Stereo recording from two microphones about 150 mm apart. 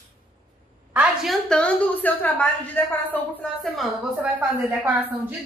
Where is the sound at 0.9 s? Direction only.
10° right (ahead or behind).